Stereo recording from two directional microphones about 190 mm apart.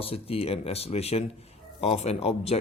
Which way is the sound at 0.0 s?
30° left (ahead or behind).